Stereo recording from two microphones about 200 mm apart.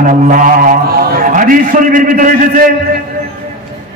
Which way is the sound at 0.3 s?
40° right (ahead or behind).